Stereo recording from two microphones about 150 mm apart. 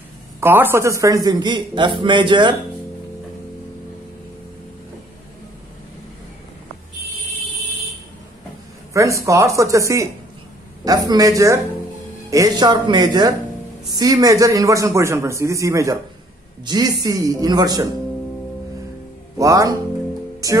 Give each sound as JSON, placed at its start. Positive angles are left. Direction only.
{"t": 0.4, "sound": "a man's voice", "side_deg": -15}
{"t": 8.9, "sound": "a man's voice", "side_deg": -20}
{"t": 19.3, "sound": "a man's voice", "side_deg": -25}
{"t": 20.4, "sound": "music", "side_deg": -25}